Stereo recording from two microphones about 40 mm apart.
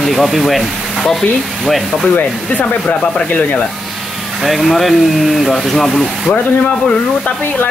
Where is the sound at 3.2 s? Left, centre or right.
Left.